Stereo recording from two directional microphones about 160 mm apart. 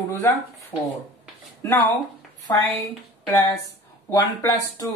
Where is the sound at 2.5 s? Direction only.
15° left (ahead or behind).